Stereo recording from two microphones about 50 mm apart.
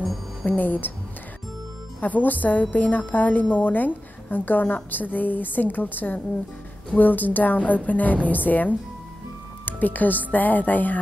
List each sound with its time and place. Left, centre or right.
0.0 s music: centre
0.5 s a woman's voice: left
2.0 s a woman's voice: left